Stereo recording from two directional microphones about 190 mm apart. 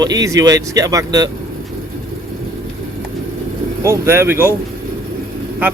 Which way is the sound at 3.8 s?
15° right (ahead or behind).